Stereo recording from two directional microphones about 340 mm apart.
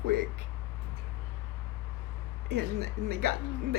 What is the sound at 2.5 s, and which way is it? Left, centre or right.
Speech, right.